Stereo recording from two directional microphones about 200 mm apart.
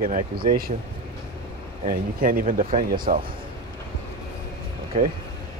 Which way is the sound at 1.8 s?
45° right (ahead or behind).